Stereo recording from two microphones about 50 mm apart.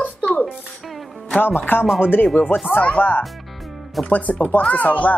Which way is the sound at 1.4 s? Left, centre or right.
Left.